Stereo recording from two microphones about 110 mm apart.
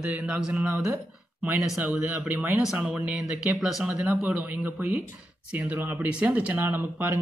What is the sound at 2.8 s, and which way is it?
Speech, 10° right (ahead or behind).